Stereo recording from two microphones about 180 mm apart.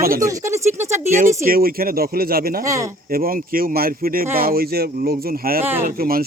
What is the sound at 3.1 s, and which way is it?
Speech, 55° right (ahead or behind).